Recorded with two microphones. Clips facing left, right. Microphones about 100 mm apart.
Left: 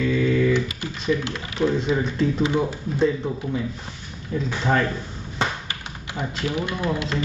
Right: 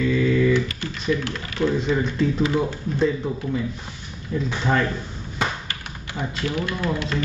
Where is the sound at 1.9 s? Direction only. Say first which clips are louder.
Even; centre (ahead or behind).